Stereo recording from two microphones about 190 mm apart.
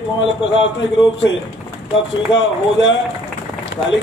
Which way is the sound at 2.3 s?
70° left (ahead or behind).